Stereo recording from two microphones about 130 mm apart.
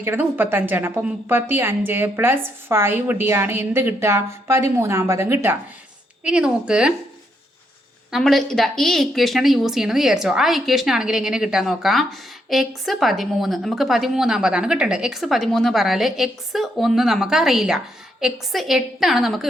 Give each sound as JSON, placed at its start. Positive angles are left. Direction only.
{"t": 0.0, "sound": "a woman's voice", "side_deg": -15}
{"t": 8.1, "sound": "a woman's voice", "side_deg": 0}